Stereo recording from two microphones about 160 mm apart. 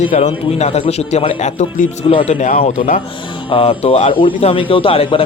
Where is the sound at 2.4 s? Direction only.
55° left (ahead or behind).